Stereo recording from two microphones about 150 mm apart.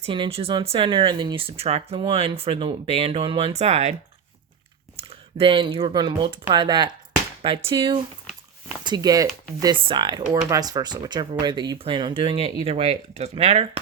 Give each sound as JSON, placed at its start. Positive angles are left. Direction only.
{"t": 0.0, "sound": "speech", "side_deg": -35}
{"t": 4.9, "sound": "speech", "side_deg": -40}